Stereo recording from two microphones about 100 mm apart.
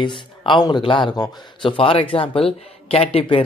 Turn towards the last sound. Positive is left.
turn(degrees=70)  # may be behind; listen again after turning